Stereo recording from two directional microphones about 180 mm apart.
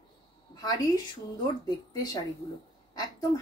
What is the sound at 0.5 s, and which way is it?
Speech, 20° left (ahead or behind).